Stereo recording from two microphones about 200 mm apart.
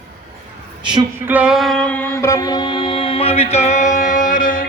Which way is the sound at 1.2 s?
5° right (ahead or behind).